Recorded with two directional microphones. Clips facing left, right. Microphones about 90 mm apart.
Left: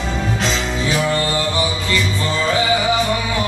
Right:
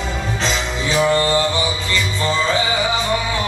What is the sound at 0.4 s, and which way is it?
Music, 30° right (ahead or behind).